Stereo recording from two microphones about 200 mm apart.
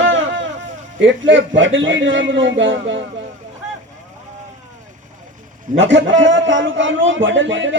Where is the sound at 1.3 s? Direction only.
65° right (ahead or behind).